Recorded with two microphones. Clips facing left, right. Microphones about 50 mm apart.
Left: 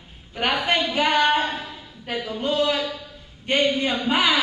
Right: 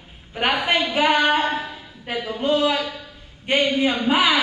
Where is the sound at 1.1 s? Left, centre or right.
Centre.